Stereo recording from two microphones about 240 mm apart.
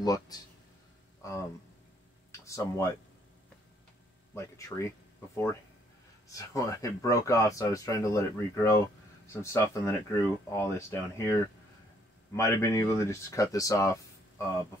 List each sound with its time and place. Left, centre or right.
0.0 s speech: centre
2.4 s speech: centre
4.3 s speech: centre
12.4 s speech: centre